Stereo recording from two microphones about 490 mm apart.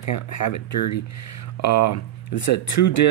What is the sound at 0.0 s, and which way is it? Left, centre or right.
Speech, left.